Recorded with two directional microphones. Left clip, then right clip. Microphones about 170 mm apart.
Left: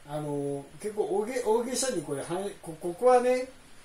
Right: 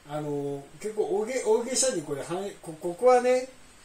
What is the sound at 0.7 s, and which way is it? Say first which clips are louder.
Speech: right 2 dB; 5° left (ahead or behind).